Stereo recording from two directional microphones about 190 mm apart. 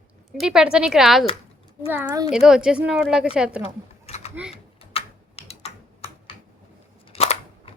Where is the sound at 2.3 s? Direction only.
5° right (ahead or behind).